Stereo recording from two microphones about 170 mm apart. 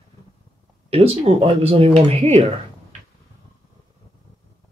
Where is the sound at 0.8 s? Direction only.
35° right (ahead or behind).